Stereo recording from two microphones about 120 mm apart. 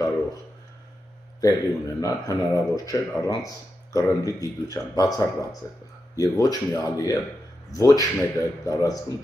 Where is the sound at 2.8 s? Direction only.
30° left (ahead or behind).